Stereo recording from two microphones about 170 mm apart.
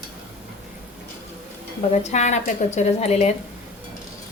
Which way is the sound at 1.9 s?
40° left (ahead or behind).